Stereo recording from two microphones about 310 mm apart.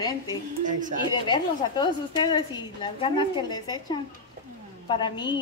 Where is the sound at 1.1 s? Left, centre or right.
Centre.